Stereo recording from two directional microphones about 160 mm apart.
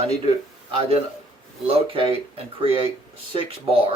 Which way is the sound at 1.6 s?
35° right (ahead or behind).